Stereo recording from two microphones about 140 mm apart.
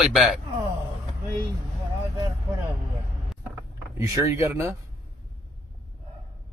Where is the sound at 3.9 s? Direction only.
25° right (ahead or behind).